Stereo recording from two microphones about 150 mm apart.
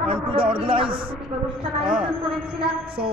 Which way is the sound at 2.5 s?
35° right (ahead or behind).